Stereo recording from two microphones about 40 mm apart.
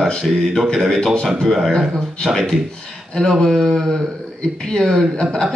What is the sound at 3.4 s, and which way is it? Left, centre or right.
Speech, centre.